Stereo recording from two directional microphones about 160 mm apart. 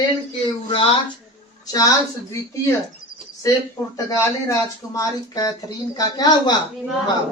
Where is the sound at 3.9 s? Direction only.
20° left (ahead or behind).